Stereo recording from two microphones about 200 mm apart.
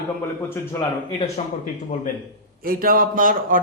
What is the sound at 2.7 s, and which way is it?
Speech, 45° right (ahead or behind).